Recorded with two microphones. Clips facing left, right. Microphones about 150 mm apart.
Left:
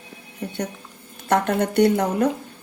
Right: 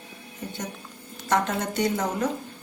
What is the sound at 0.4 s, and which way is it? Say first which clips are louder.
Speech: left 6 dB; 65° left (ahead or behind).